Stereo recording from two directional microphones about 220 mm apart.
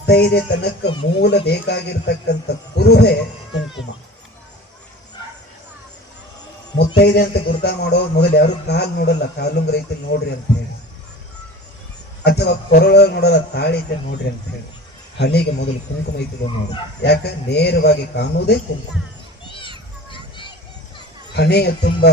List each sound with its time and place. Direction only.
0.0 s speech: 50° left (ahead or behind)
6.7 s speech: 50° left (ahead or behind)
12.2 s speech: 50° left (ahead or behind)
15.2 s speech: 50° left (ahead or behind)
17.0 s speech: 50° left (ahead or behind)
20.1 s a sound: 20° left (ahead or behind)
21.3 s speech: 50° left (ahead or behind)